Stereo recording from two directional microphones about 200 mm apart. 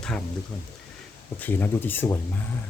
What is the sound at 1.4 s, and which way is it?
Speech, 10° left (ahead or behind).